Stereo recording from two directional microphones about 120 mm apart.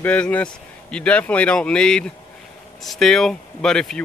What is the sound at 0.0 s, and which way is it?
Speech, 10° left (ahead or behind).